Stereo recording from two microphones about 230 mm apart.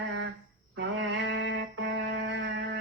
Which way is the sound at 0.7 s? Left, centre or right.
Right.